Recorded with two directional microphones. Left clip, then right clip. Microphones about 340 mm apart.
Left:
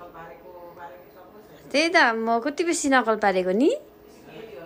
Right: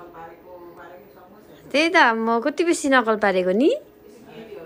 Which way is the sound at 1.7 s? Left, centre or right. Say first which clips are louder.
Right 3 dB; centre.